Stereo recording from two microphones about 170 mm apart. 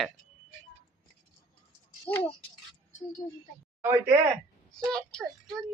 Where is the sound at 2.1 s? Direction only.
10° left (ahead or behind).